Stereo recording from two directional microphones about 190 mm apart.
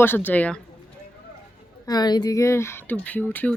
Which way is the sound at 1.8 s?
20° left (ahead or behind).